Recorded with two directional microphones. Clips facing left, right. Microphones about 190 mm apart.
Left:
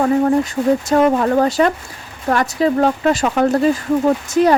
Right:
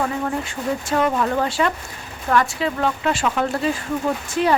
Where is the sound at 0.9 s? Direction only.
40° left (ahead or behind).